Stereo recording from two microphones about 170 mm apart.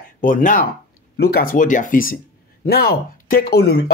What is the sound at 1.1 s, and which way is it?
Speech, 70° left (ahead or behind).